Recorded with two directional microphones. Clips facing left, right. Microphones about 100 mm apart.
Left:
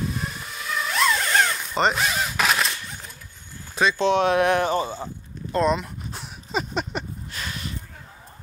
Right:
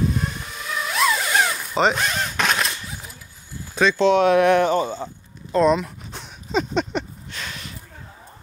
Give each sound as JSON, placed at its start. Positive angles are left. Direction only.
{"t": 0.0, "sound": "vehicle", "side_deg": 0}
{"t": 4.0, "sound": "speech", "side_deg": 25}
{"t": 4.8, "sound": "speech", "side_deg": 10}
{"t": 5.5, "sound": "a sound", "side_deg": 0}